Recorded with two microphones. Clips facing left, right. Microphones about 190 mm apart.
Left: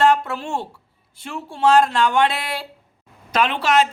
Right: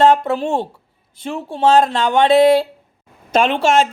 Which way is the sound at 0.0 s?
20° right (ahead or behind).